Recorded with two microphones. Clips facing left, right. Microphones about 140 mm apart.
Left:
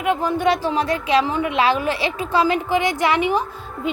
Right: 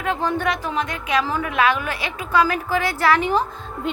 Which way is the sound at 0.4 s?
30° left (ahead or behind).